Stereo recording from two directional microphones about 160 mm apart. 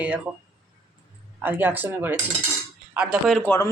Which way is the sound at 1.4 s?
10° right (ahead or behind).